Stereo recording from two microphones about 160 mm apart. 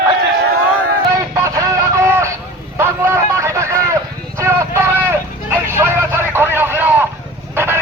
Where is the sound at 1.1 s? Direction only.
20° right (ahead or behind).